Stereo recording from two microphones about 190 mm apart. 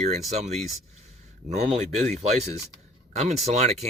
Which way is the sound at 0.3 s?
35° right (ahead or behind).